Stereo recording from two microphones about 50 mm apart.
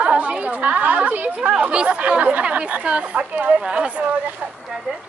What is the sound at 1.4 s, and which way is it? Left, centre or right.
Speech, right.